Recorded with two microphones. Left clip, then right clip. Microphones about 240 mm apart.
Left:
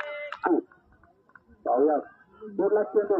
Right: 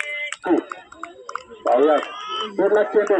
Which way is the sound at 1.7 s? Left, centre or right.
Right.